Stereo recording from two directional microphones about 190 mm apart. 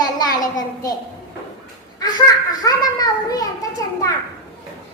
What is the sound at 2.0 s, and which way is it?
A child's voice, 20° left (ahead or behind).